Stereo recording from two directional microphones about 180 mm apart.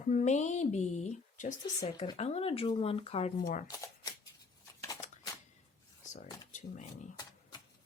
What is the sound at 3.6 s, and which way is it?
Speech, 20° left (ahead or behind).